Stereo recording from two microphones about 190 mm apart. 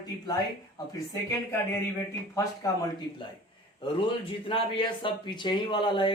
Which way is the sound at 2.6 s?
20° left (ahead or behind).